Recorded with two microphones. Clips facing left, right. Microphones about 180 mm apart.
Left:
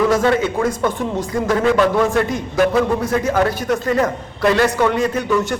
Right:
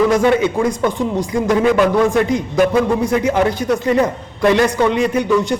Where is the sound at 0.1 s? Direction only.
15° right (ahead or behind).